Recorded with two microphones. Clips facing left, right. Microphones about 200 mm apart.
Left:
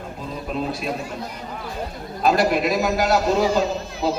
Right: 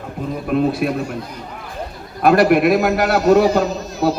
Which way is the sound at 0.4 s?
60° right (ahead or behind).